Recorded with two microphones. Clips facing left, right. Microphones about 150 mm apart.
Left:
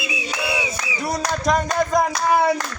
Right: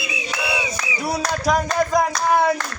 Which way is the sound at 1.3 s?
5° right (ahead or behind).